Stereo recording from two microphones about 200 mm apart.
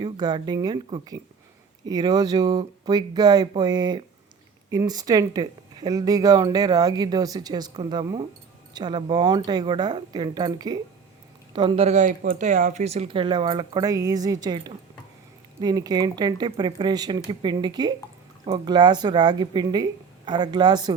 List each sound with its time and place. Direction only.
0.0 s speech: 20° right (ahead or behind)
15.6 s speech: 20° right (ahead or behind)